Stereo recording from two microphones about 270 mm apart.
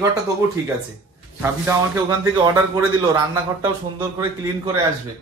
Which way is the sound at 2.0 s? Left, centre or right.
Centre.